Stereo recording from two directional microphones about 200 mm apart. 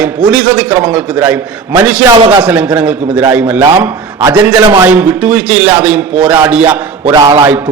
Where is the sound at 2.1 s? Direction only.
20° right (ahead or behind).